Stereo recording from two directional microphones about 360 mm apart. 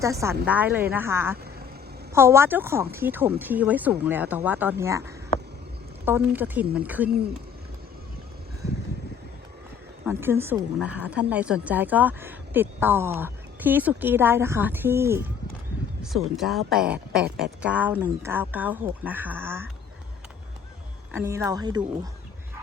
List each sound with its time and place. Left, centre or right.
0.0 s a woman's voice: centre
10.1 s a woman's voice: centre
21.1 s speech: centre